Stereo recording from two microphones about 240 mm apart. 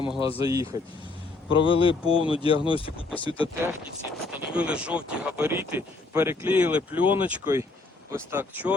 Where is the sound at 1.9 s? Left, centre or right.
Left.